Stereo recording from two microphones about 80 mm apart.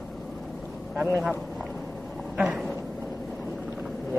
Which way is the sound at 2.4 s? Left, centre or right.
Centre.